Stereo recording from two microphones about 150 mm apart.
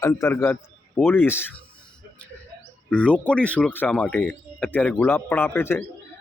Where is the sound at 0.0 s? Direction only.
20° left (ahead or behind).